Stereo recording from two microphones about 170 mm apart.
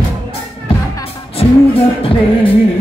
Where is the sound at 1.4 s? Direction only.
30° left (ahead or behind).